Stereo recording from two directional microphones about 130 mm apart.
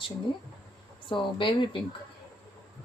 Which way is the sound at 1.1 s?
40° left (ahead or behind).